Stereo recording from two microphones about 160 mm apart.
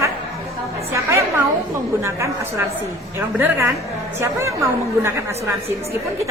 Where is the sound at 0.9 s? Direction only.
20° right (ahead or behind).